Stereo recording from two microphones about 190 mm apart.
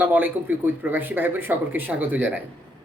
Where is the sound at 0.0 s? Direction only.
10° right (ahead or behind).